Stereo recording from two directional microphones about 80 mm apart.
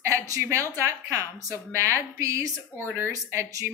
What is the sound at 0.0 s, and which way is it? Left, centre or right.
A woman's voice, right.